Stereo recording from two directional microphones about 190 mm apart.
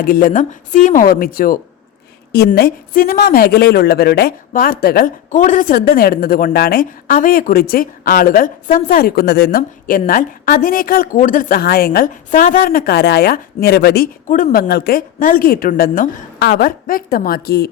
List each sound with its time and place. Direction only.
0.0 s speech: 50° left (ahead or behind)
2.6 s speech: 50° left (ahead or behind)